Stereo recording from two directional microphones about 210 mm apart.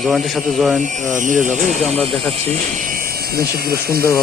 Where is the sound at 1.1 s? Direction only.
35° right (ahead or behind).